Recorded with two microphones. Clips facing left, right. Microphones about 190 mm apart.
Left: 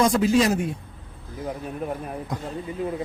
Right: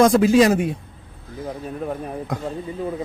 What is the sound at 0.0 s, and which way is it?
Speech, 90° right.